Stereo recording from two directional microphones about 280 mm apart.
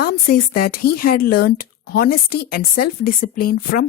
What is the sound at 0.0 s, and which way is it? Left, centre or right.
A woman's voice, left.